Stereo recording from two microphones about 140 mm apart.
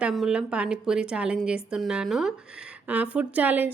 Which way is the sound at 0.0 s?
5° right (ahead or behind).